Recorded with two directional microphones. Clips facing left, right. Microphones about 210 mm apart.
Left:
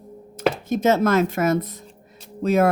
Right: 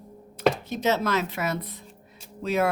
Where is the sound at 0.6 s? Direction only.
50° left (ahead or behind).